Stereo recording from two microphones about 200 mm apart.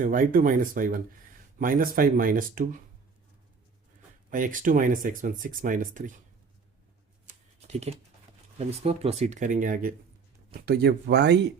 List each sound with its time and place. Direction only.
0.0 s speech: 45° right (ahead or behind)
4.3 s speech: 40° right (ahead or behind)
7.7 s speech: 35° right (ahead or behind); by 11.3 s 60° right (ahead or behind)